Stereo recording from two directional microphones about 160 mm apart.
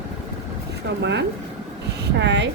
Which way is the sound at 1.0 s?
90° right.